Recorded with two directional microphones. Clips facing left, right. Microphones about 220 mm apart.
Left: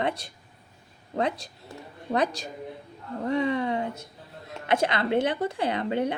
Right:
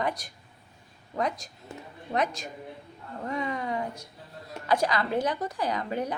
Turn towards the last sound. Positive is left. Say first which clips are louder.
# left 4 dB
turn(degrees=25)  # may be behind; listen again after turning